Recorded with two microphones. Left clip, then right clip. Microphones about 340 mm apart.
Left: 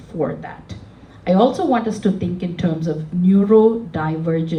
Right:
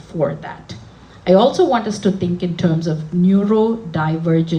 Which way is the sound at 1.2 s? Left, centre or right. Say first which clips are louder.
Right 4 dB; right.